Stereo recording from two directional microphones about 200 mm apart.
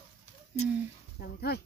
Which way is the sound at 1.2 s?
50° left (ahead or behind).